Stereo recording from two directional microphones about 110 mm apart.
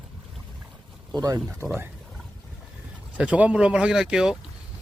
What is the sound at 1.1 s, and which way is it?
Speech, 30° right (ahead or behind).